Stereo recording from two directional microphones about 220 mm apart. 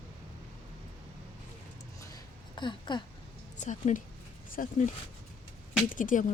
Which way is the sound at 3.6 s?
35° left (ahead or behind).